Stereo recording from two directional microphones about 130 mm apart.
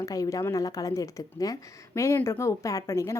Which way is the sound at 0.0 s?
25° left (ahead or behind).